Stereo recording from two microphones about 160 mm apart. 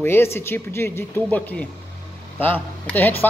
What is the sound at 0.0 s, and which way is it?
Speech, 15° left (ahead or behind).